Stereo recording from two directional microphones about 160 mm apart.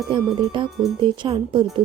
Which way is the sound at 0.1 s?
30° right (ahead or behind).